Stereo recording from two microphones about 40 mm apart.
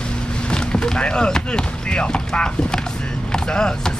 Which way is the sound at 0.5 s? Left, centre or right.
Left.